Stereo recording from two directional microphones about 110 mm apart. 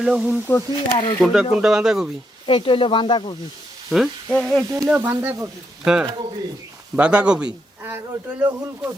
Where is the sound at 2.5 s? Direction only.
50° left (ahead or behind).